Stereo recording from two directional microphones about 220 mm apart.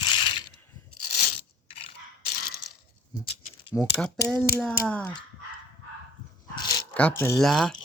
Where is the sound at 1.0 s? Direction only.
40° left (ahead or behind).